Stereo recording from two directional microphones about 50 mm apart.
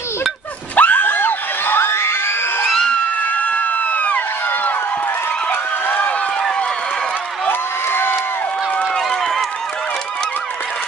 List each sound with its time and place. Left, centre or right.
0.7 s screaming: left
1.9 s crowd: left
3.2 s crowd: left
5.5 s a sound: left
7.4 s crowd: left
8.9 s run: centre